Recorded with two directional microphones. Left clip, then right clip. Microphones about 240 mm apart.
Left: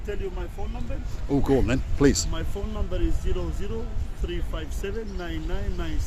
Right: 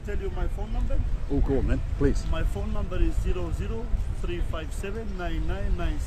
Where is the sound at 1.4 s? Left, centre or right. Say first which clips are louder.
Left 7 dB; left.